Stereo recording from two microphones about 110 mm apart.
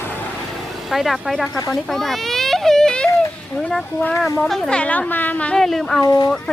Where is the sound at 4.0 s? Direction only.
15° left (ahead or behind).